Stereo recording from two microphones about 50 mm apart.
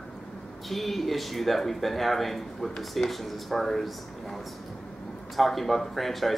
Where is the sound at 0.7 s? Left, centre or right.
Centre.